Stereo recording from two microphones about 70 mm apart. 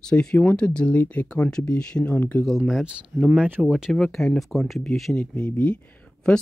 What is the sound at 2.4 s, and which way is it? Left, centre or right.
Speech, centre.